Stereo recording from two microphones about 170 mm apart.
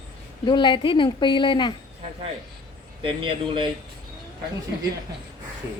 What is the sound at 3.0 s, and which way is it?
Speech, 30° right (ahead or behind).